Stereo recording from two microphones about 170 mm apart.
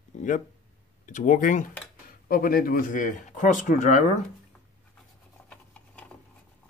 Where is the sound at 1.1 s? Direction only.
50° left (ahead or behind).